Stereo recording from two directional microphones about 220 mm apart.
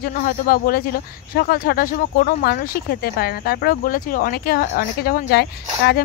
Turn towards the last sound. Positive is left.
turn(degrees=45)  # may be behind; listen again after turning